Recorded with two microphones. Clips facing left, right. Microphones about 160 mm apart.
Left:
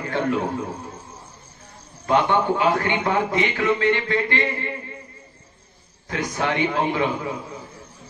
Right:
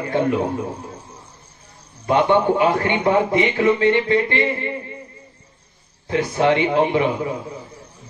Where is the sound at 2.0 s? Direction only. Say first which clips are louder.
Right 3 dB; 15° right (ahead or behind).